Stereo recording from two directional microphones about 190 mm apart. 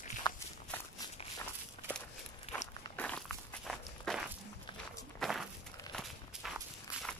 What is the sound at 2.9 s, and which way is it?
Walk, 5° left (ahead or behind).